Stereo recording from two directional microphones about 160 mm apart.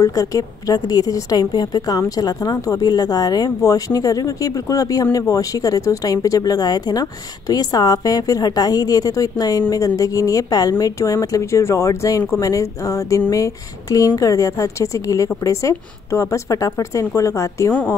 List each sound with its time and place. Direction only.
0.0 s a woman's voice: 20° left (ahead or behind)